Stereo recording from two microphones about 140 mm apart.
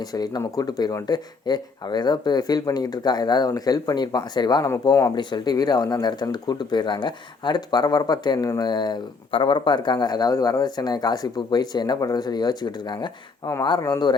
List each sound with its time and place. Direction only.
0.1 s speech: 25° left (ahead or behind)
5.1 s speech: 30° left (ahead or behind)